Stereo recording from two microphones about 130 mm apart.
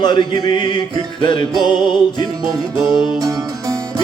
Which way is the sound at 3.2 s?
25° right (ahead or behind).